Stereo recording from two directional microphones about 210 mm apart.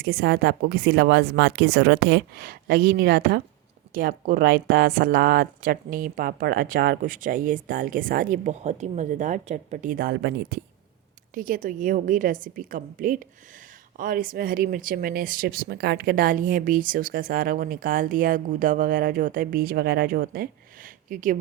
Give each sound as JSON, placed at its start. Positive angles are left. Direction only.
{"t": 0.0, "sound": "speech", "side_deg": -45}